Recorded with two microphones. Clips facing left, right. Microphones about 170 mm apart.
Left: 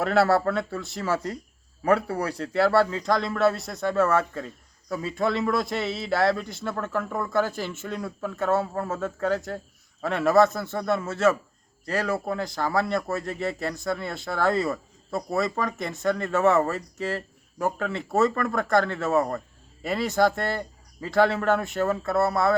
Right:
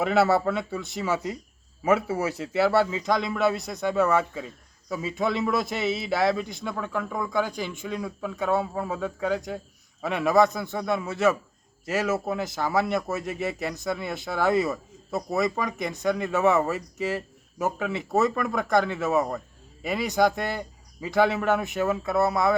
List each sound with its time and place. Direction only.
0.0 s a man's voice: centre (ahead or behind)
13.5 s speech: 15° right (ahead or behind)
13.7 s a man's voice: centre (ahead or behind)
20.5 s a sound: 10° right (ahead or behind)
21.3 s a man's voice: centre (ahead or behind)